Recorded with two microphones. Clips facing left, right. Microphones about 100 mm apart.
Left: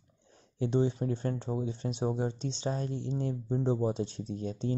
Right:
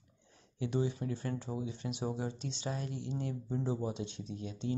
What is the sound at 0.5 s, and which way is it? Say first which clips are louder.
Speech: left 5 dB; 30° left (ahead or behind).